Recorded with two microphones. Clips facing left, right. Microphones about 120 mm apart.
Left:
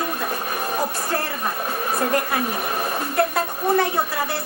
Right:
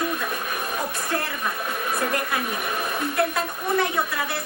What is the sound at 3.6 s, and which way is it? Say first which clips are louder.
Speech: left 3 dB; 35° left (ahead or behind).